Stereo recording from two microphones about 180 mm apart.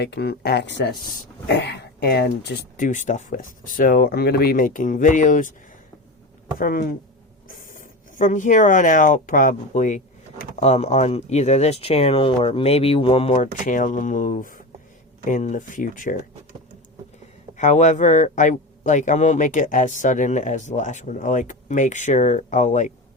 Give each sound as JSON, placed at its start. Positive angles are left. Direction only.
{"t": 0.0, "sound": "speech", "side_deg": 65}
{"t": 6.6, "sound": "speech", "side_deg": 50}
{"t": 13.3, "sound": "speech", "side_deg": 45}
{"t": 17.6, "sound": "speech", "side_deg": 40}